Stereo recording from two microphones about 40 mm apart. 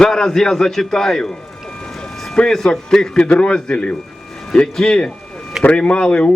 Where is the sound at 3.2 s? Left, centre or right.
Left.